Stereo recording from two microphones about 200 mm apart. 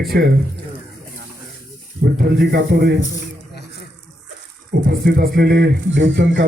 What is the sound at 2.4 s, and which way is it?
Speech, 50° right (ahead or behind).